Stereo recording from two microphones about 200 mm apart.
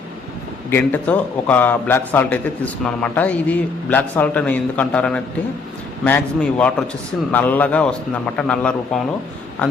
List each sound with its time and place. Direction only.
0.7 s a man's voice: 10° left (ahead or behind)